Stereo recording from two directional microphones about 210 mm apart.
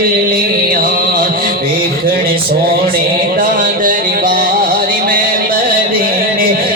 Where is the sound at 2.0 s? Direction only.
45° right (ahead or behind).